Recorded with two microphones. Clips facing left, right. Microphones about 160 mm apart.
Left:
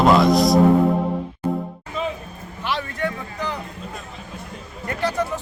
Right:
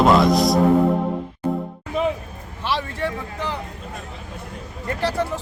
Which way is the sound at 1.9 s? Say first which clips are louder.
Right 5 dB; 65° right (ahead or behind).